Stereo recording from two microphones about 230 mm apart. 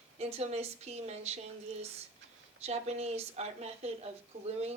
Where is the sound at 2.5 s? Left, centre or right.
Right.